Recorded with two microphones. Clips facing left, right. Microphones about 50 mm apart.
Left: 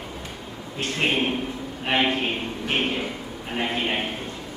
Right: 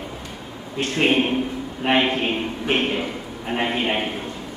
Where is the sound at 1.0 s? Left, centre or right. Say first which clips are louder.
Right 5 dB; centre.